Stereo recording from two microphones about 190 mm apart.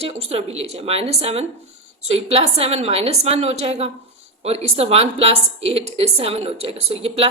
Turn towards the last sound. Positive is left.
turn(degrees=-30)  # may be behind; listen again after turning